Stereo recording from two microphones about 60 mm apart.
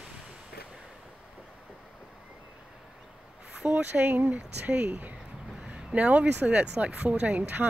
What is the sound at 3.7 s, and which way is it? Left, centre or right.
Speech, right.